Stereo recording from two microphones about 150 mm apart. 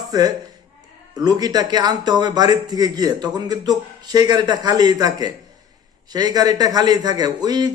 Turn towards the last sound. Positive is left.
turn(degrees=-25)  # may be behind; listen again after turning